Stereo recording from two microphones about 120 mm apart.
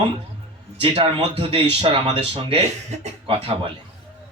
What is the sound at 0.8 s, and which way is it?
Speech, 50° right (ahead or behind).